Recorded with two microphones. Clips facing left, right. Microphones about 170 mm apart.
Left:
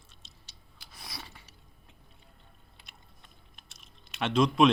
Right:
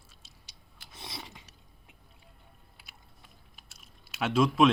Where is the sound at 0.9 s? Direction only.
25° right (ahead or behind).